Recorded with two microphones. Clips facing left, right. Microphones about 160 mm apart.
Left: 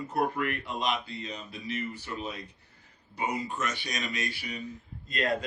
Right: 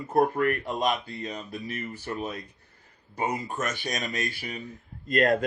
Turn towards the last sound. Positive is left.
turn(degrees=-50)  # may be behind; listen again after turning